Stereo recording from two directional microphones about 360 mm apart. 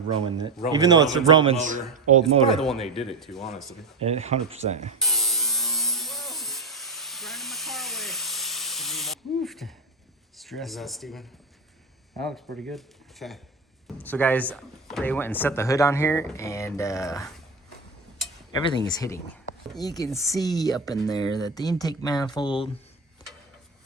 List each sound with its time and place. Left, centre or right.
0.1 s speech: centre
2.5 s speech: centre
4.0 s speech: centre
4.9 s electric shaver: centre
10.3 s speech: centre
18.9 s speech: centre